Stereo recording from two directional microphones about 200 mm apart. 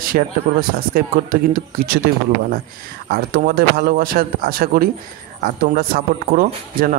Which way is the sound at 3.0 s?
50° right (ahead or behind).